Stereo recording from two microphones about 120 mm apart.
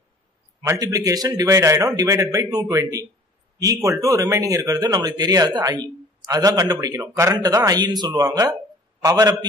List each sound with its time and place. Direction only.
0.6 s a man's voice: 25° right (ahead or behind)